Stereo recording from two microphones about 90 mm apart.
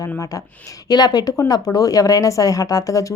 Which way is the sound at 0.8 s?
50° left (ahead or behind).